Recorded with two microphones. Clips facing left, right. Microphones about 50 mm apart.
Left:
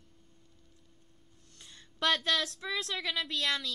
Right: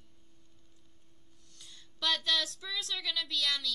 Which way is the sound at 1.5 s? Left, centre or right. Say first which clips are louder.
Left 1 dB; left.